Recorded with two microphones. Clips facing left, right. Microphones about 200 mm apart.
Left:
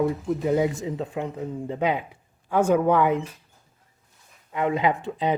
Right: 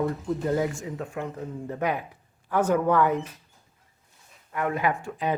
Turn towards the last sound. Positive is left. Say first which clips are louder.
# left 3 dB
turn(degrees=20)  # may be behind; listen again after turning